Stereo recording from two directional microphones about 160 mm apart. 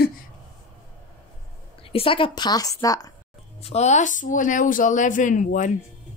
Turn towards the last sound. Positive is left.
turn(degrees=50)  # may be behind; listen again after turning